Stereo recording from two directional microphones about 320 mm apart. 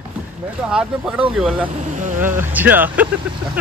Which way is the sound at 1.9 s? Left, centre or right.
Right.